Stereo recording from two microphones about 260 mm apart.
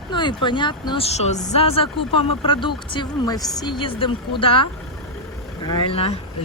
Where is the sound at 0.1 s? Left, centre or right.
Centre.